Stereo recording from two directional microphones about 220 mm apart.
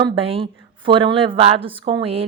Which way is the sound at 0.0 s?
25° right (ahead or behind).